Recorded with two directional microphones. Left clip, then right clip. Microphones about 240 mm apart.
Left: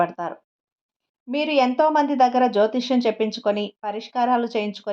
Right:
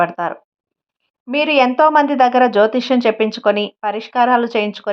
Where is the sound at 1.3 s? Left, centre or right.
Centre.